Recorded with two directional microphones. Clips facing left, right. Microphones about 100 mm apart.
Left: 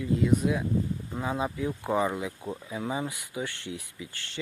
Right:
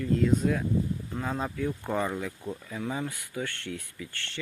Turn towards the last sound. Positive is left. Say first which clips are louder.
# right 1 dB
turn(degrees=15)  # may be behind; listen again after turning